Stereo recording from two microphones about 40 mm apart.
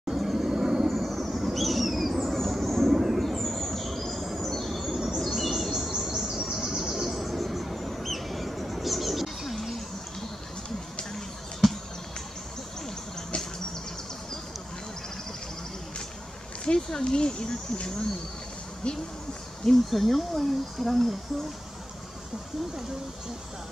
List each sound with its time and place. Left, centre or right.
0.1 s vehicle: centre
0.6 s vehicle: centre
0.8 s a sound: centre
5.2 s bird: centre
6.2 s bird: right
6.5 s bird: centre
16.6 s speech: left
19.7 s speech: centre